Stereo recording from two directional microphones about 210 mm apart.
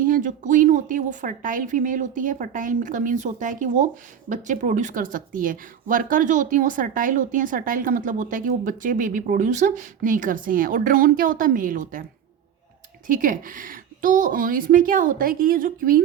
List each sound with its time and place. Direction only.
0.0 s speech: 40° right (ahead or behind)
13.1 s speech: 40° right (ahead or behind)